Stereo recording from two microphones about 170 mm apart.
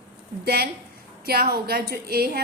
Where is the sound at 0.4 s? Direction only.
65° right (ahead or behind).